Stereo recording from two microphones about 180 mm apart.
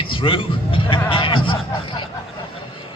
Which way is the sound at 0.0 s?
30° left (ahead or behind).